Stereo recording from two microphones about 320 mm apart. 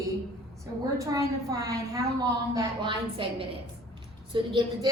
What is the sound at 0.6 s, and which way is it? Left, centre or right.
A woman's voice, centre.